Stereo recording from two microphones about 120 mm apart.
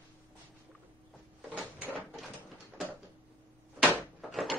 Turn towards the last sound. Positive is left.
turn(degrees=0)  # may be behind; listen again after turning